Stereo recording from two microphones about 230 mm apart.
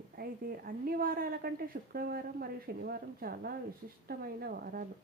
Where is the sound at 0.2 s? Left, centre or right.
Right.